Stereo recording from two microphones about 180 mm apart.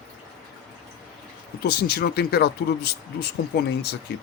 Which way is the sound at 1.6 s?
60° left (ahead or behind).